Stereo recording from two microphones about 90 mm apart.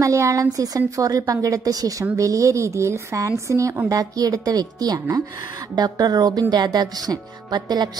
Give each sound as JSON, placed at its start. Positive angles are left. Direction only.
{"t": 0.0, "sound": "a woman's voice", "side_deg": -35}